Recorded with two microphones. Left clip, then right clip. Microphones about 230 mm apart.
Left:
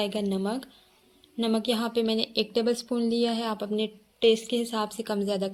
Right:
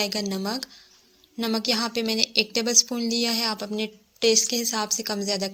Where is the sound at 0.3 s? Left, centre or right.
Right.